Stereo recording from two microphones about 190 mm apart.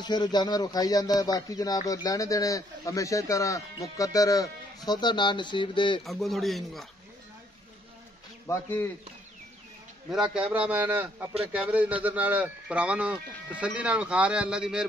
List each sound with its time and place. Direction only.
0.0 s speech: 20° left (ahead or behind)
6.0 s speech: centre (ahead or behind)
8.5 s speech: 10° left (ahead or behind)
10.1 s speech: 5° right (ahead or behind)